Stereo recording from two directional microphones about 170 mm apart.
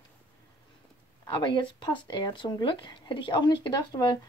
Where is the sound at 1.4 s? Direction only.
25° left (ahead or behind).